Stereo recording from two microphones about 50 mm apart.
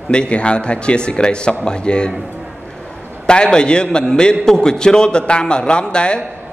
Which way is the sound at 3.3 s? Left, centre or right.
Centre.